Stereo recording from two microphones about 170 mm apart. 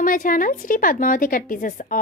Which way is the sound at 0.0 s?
55° left (ahead or behind).